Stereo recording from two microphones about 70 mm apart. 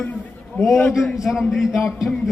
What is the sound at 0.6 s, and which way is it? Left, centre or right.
Speech, centre.